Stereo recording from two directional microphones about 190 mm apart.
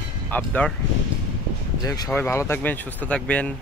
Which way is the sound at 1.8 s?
20° left (ahead or behind).